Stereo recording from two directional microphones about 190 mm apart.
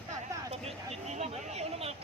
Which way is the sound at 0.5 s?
35° right (ahead or behind).